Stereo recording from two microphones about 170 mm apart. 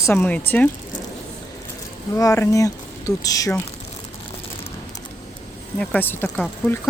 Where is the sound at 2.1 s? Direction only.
20° left (ahead or behind).